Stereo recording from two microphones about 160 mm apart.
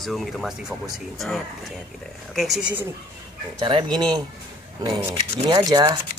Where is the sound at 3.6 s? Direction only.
30° right (ahead or behind).